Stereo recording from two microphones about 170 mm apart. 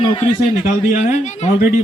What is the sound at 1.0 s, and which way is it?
Speech, 45° left (ahead or behind).